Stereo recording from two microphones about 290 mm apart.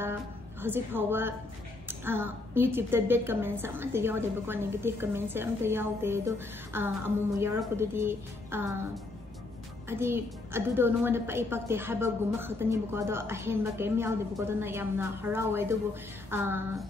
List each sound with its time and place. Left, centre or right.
0.0 s a woman's voice: centre